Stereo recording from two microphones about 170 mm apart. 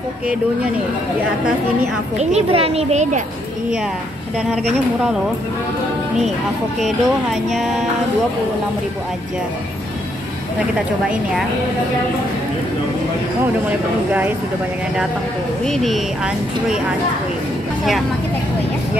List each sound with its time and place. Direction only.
2.1 s a child's voice: 35° right (ahead or behind)
7.5 s speech: centre (ahead or behind)
13.7 s speech: 10° right (ahead or behind)
15.6 s speech: centre (ahead or behind)